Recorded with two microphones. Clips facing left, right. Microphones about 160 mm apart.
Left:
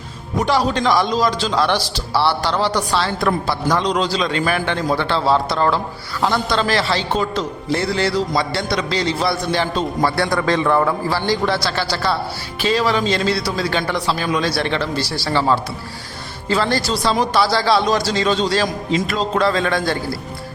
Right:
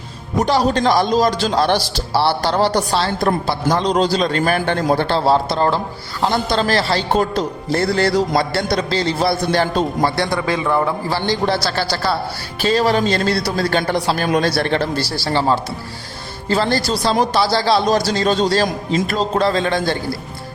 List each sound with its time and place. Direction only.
0.4 s a man's voice: 40° right (ahead or behind)
3.9 s a man's voice: 45° right (ahead or behind)
9.5 s a man's voice: 50° right (ahead or behind)
10.2 s a man's voice: 10° right (ahead or behind)
11.1 s a man's voice: 30° right (ahead or behind); by 15.0 s 45° right (ahead or behind)
15.1 s a man's voice: 30° right (ahead or behind)